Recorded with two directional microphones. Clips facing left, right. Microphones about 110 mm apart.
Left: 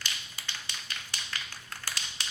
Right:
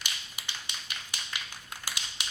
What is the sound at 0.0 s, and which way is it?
Tap, 15° right (ahead or behind).